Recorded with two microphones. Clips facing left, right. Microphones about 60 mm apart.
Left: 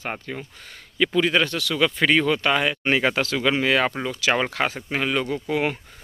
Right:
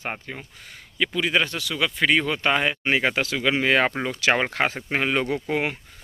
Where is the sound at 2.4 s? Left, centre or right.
Right.